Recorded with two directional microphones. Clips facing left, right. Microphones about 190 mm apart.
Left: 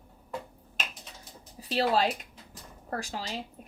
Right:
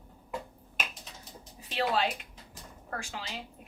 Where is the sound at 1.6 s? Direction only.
35° left (ahead or behind).